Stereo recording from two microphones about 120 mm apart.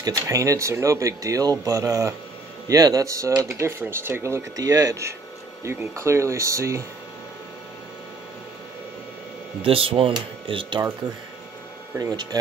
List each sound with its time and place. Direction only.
0.0 s speech: 25° right (ahead or behind)
9.6 s speech: 50° right (ahead or behind)
12.0 s speech: 35° right (ahead or behind)